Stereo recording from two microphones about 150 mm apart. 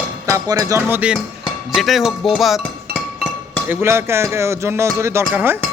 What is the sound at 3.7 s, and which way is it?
Speech, 15° right (ahead or behind).